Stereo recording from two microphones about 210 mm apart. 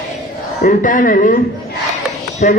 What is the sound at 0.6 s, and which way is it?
Speech, 40° left (ahead or behind).